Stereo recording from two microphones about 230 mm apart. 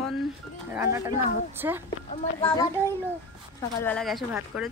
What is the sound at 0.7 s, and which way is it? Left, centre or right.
Speech, centre.